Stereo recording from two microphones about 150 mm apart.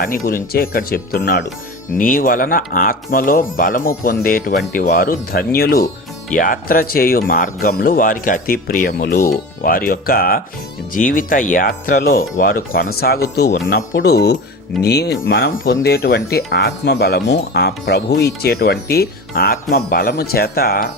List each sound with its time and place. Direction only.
0.0 s speech: 70° left (ahead or behind); by 1.4 s 90° left
2.0 s speech: 70° left (ahead or behind); by 5.9 s 90° left
6.3 s speech: 65° left (ahead or behind)
10.9 s speech: 65° left (ahead or behind); by 20.8 s 85° left